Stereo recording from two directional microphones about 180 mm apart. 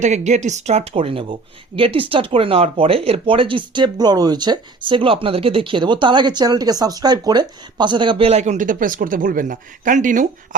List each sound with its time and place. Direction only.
0.0 s speech: 40° right (ahead or behind)